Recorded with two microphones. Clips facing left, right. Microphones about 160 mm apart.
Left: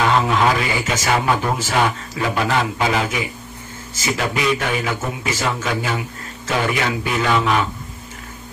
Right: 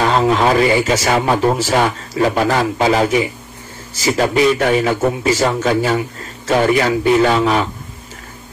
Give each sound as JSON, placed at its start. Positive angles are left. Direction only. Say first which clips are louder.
{"t": 0.0, "sound": "a man's voice", "louder": "right 3 dB", "side_deg": -35}